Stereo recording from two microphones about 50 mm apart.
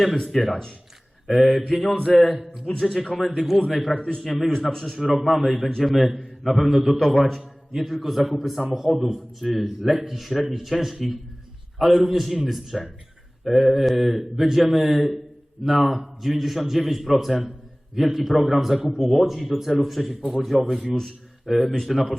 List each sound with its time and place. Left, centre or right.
0.3 s a man's voice: centre
3.9 s a man's voice: centre
4.2 s a man's voice: centre